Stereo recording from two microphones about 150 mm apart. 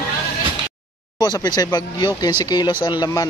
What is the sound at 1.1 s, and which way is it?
Speech, 25° left (ahead or behind).